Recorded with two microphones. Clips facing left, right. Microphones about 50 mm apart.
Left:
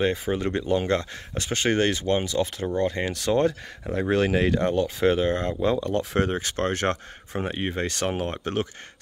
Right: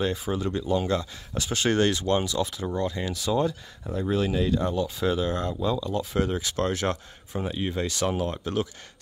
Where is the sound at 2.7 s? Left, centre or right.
Left.